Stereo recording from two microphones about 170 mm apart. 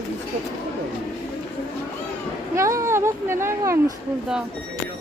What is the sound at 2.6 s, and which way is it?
Speech, 15° right (ahead or behind).